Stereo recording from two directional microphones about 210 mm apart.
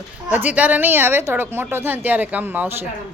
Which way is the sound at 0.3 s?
10° right (ahead or behind).